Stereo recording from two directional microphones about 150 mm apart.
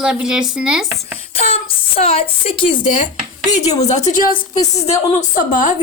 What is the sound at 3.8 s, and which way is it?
A woman's voice, 50° left (ahead or behind).